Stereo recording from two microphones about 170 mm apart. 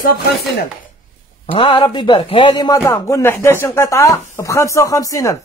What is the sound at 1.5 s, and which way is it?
A man's voice, 30° left (ahead or behind).